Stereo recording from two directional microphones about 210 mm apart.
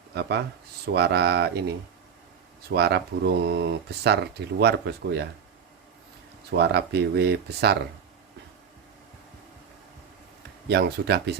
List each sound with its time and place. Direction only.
0.1 s speech: 50° right (ahead or behind)
2.7 s speech: 50° right (ahead or behind)
6.6 s speech: 50° right (ahead or behind)
10.7 s speech: 50° right (ahead or behind)